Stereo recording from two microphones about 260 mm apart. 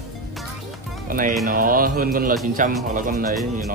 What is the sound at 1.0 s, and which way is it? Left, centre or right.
Speech, right.